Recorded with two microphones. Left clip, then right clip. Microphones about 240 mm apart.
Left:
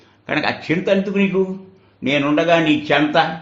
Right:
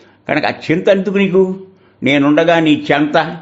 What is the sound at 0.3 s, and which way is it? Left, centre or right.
A man's voice, right.